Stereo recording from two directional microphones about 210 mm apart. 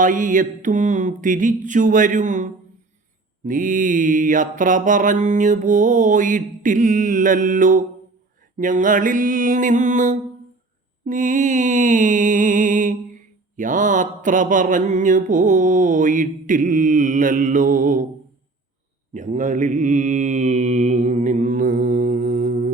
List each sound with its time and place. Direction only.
0.0 s mantra: 40° right (ahead or behind)
11.0 s music: 40° right (ahead or behind)
13.6 s mantra: 40° right (ahead or behind)
19.1 s mantra: 35° right (ahead or behind)